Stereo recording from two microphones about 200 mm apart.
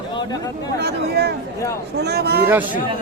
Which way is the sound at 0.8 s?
55° right (ahead or behind).